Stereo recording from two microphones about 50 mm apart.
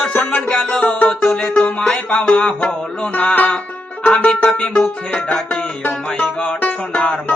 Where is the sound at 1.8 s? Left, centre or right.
Centre.